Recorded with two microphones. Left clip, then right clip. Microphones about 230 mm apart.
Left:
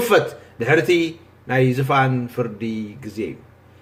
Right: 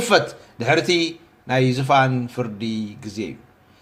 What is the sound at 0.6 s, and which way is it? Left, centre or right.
A man's voice, right.